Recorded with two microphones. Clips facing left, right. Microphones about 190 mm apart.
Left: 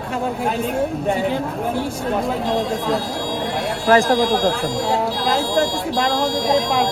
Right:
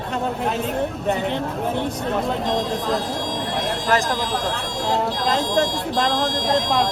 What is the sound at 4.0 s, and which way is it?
Speech, 50° left (ahead or behind).